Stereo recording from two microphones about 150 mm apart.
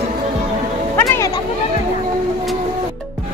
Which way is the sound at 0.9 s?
15° left (ahead or behind).